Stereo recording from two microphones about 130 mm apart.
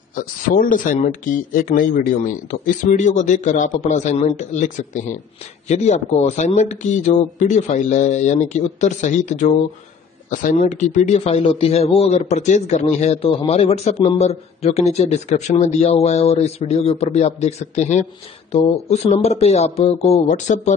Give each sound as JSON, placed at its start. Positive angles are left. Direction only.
{"t": 0.7, "sound": "a man's voice", "side_deg": 80}
{"t": 5.7, "sound": "speech", "side_deg": 60}
{"t": 10.3, "sound": "speech", "side_deg": 80}